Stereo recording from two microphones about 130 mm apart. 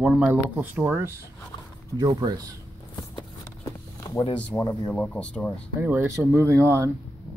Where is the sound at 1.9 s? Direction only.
30° right (ahead or behind).